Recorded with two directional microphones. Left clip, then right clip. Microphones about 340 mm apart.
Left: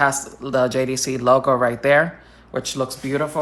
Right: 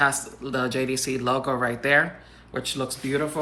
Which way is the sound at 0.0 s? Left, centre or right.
Left.